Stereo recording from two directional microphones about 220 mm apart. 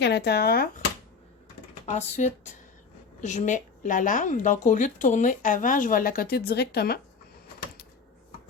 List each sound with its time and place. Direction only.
0.0 s speech: 50° left (ahead or behind)
1.9 s a woman's voice: 30° left (ahead or behind); by 7.0 s 45° left (ahead or behind)